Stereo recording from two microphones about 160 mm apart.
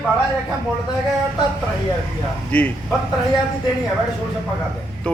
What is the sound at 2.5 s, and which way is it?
Speech, 10° left (ahead or behind).